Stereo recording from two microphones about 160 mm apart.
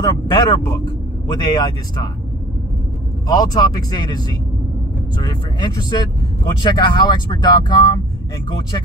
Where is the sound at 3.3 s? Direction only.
25° left (ahead or behind).